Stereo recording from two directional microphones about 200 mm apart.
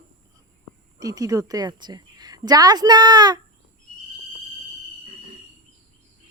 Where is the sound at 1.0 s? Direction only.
15° right (ahead or behind).